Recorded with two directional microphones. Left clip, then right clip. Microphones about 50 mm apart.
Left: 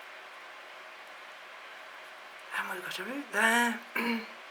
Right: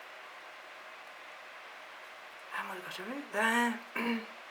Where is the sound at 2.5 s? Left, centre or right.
Left.